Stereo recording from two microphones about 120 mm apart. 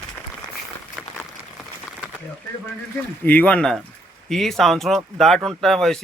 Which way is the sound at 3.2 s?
10° left (ahead or behind).